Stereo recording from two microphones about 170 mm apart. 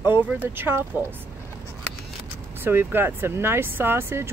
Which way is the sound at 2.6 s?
15° right (ahead or behind).